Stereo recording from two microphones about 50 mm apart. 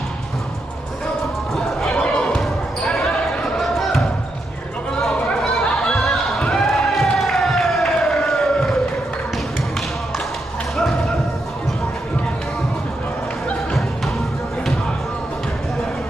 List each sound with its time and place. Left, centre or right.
1.5 s music: centre
2.0 s basketball bounce: centre
5.1 s chatter: centre
5.9 s a sound: centre